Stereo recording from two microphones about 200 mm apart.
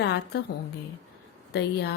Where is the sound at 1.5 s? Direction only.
55° left (ahead or behind).